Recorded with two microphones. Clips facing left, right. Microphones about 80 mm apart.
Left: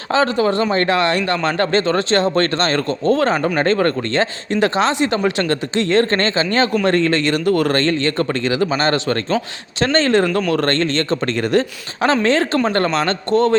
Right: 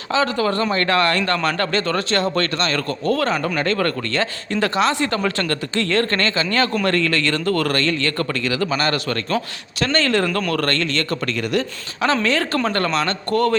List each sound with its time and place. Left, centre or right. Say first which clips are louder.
0.1 s speech: left 3 dB; left
0.3 s speech: left 3 dB; left